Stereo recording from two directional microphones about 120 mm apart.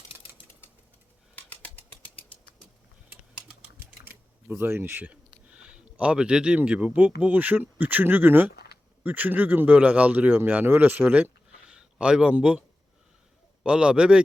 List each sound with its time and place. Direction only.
1.4 s bird flight: 10° left (ahead or behind)
3.8 s typing: 20° right (ahead or behind)
5.5 s a man's voice: 10° right (ahead or behind)
13.7 s speech: 10° right (ahead or behind)